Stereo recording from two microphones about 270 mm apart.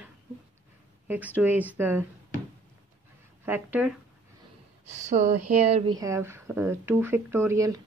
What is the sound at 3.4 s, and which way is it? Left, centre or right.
Speech, centre.